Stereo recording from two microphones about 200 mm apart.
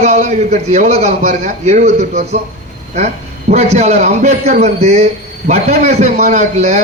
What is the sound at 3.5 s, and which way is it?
A man's voice, 35° right (ahead or behind).